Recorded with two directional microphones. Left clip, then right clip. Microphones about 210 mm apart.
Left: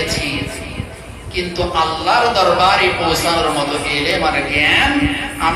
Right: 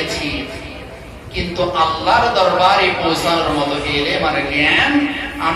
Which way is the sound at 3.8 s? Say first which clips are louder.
Left 1 dB; 50° left (ahead or behind).